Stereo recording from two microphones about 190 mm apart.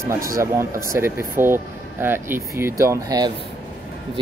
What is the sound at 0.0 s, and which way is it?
Speech, 15° right (ahead or behind).